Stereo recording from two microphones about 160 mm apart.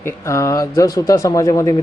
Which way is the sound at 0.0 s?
20° left (ahead or behind).